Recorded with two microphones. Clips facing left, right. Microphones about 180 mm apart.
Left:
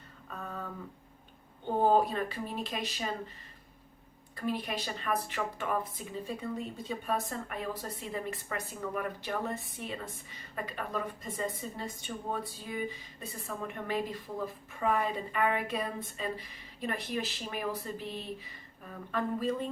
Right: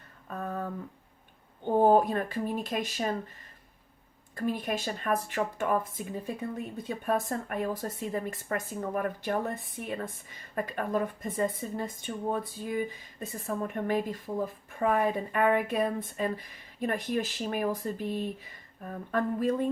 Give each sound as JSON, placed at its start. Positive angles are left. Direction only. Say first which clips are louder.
{"t": 0.3, "sound": "a sound", "louder": "right 6 dB", "side_deg": -55}
{"t": 1.8, "sound": "speech", "louder": "right 3 dB", "side_deg": -50}
{"t": 4.4, "sound": "speech", "louder": "right 3 dB", "side_deg": -45}